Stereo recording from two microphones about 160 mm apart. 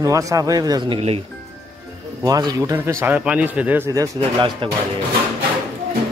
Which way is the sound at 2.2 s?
25° right (ahead or behind).